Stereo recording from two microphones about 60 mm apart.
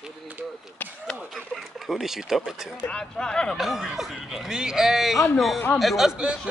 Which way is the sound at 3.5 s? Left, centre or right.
Centre.